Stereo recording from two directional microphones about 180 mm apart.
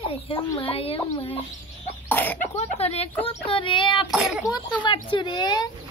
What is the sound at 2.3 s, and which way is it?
A woman's voice, 40° left (ahead or behind).